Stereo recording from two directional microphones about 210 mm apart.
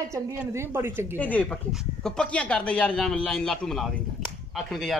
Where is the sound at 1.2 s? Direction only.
5° left (ahead or behind).